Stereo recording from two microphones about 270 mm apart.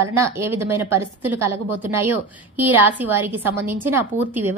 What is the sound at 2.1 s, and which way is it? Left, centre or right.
Speech, right.